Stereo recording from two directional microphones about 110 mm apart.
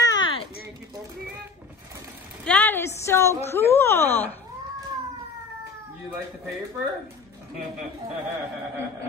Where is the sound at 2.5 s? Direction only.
15° left (ahead or behind).